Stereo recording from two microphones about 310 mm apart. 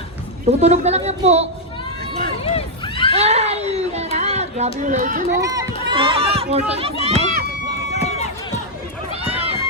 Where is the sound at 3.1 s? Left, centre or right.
Right.